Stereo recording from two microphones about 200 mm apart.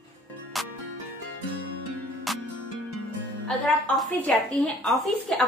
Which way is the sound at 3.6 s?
5° left (ahead or behind).